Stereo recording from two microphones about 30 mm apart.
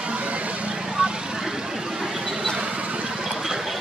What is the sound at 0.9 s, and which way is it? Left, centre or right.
Vehicle, right.